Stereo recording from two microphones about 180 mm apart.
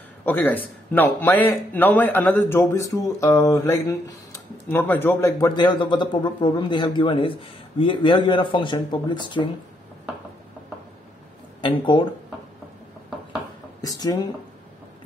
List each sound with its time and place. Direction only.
0.2 s a man's voice: 10° left (ahead or behind); by 9.5 s 25° left (ahead or behind)
11.6 s speech: 25° left (ahead or behind)
13.7 s speech: 20° left (ahead or behind)